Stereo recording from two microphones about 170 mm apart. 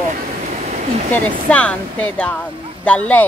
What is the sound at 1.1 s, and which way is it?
Speech, 10° left (ahead or behind).